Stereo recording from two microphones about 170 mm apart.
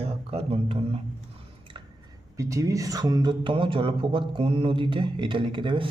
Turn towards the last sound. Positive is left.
turn(degrees=-30)  # may be behind; listen again after turning